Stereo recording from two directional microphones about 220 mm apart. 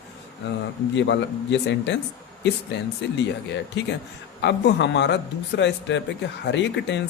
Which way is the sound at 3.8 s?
55° left (ahead or behind).